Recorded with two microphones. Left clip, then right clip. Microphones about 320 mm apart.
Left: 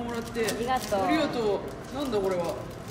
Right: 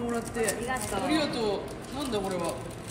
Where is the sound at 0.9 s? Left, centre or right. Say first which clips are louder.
Left 6 dB; left.